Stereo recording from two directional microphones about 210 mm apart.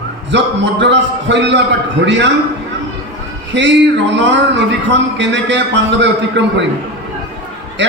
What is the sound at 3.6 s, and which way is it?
A man's voice, 55° right (ahead or behind).